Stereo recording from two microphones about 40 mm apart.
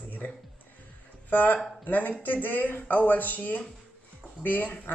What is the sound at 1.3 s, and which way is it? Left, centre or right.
Speech, left.